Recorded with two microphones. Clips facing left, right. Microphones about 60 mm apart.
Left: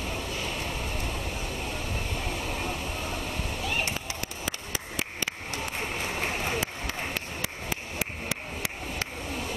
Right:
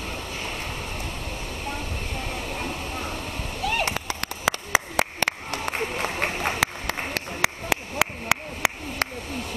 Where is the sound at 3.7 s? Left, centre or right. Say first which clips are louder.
Right 5 dB; right.